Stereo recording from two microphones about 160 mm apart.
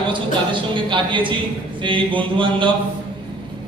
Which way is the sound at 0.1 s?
30° right (ahead or behind).